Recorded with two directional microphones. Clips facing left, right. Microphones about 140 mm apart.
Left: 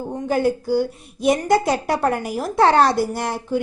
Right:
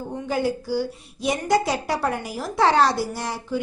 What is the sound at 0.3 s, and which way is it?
Speech, 50° left (ahead or behind).